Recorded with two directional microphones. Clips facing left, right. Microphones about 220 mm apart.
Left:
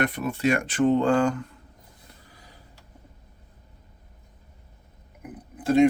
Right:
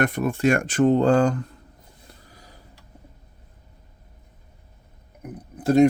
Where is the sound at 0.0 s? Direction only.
45° right (ahead or behind).